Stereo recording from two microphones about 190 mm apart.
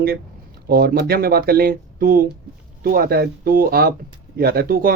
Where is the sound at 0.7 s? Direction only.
55° right (ahead or behind).